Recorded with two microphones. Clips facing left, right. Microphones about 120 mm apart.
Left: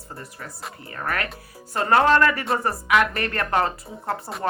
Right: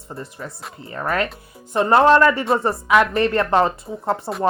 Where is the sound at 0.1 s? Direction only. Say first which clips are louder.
Right 6 dB; 25° right (ahead or behind).